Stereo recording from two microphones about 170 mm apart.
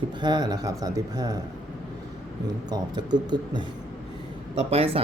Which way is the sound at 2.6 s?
25° right (ahead or behind).